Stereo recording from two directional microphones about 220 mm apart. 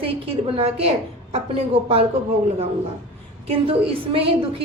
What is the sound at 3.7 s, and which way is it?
Speech, 25° right (ahead or behind).